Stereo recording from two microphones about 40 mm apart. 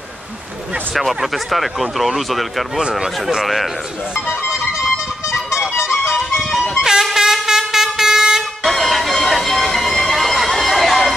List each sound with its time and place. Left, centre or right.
0.9 s speech: centre
2.9 s speech: centre
3.4 s speech: centre
4.7 s music: centre
6.7 s vehicle: centre
8.6 s music: centre